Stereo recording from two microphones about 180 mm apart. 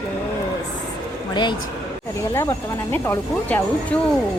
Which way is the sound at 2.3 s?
15° left (ahead or behind).